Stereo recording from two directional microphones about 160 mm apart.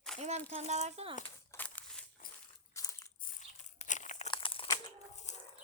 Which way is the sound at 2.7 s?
20° left (ahead or behind).